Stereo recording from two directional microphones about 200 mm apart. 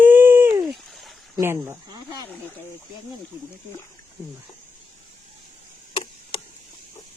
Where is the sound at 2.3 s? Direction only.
10° left (ahead or behind).